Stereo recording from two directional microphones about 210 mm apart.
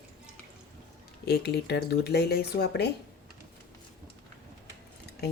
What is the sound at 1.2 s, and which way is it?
Speech, 50° left (ahead or behind).